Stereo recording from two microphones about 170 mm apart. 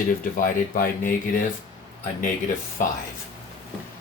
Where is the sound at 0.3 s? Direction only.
55° left (ahead or behind).